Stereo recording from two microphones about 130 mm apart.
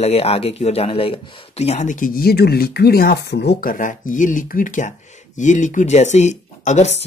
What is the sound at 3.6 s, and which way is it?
Speech, 90° left.